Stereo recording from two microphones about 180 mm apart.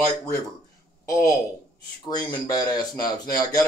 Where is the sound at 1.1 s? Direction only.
20° left (ahead or behind).